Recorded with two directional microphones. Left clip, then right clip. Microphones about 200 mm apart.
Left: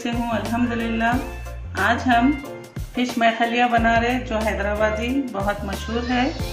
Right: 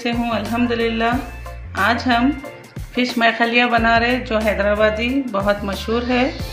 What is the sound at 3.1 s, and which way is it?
Speech, 55° right (ahead or behind).